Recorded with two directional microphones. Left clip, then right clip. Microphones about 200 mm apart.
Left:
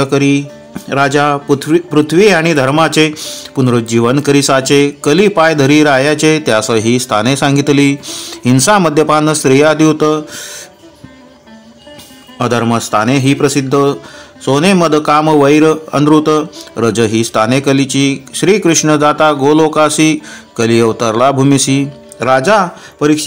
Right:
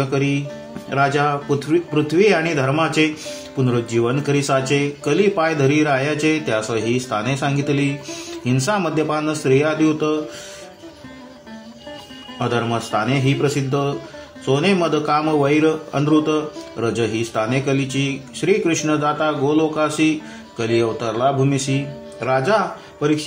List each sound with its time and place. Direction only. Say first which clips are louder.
0.0 s a man's voice: left 9 dB; 50° left (ahead or behind)
12.4 s a man's voice: left 8 dB; 55° left (ahead or behind)